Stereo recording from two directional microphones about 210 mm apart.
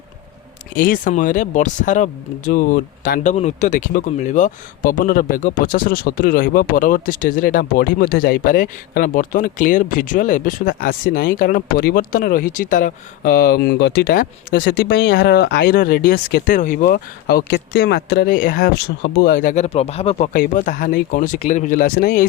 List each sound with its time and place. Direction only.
0.8 s speech: 40° left (ahead or behind)